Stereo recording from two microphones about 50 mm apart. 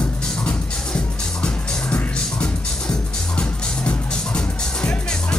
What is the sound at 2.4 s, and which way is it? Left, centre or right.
Music, left.